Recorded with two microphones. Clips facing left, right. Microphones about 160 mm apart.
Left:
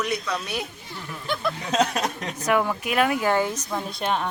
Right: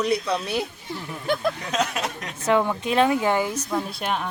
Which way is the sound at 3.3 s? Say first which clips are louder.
Even; 10° right (ahead or behind).